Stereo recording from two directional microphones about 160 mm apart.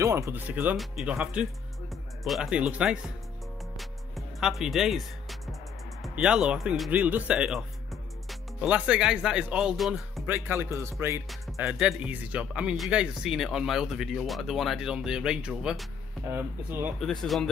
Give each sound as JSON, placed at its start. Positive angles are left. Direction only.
{"t": 0.0, "sound": "speech", "side_deg": -15}
{"t": 3.7, "sound": "music", "side_deg": 0}
{"t": 6.0, "sound": "speech", "side_deg": -5}
{"t": 16.3, "sound": "speech", "side_deg": -15}
{"t": 17.0, "sound": "speech", "side_deg": 0}